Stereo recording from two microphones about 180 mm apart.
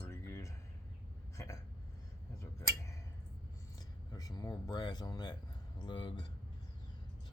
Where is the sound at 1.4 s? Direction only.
15° left (ahead or behind).